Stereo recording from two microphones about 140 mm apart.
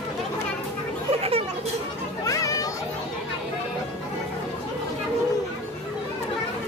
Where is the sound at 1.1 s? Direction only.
45° right (ahead or behind).